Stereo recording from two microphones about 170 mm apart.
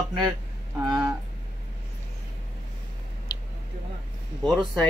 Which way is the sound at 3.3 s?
25° left (ahead or behind).